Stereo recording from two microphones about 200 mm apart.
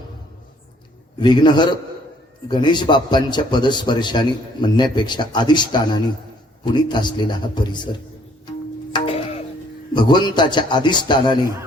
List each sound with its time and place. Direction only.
1.2 s a man's voice: 20° left (ahead or behind)
8.4 s music: 25° left (ahead or behind)
9.9 s a man's voice: 20° left (ahead or behind)